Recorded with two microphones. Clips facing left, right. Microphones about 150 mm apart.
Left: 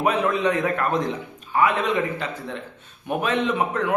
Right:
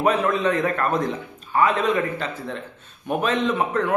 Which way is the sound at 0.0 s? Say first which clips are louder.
Right 1 dB; 15° left (ahead or behind).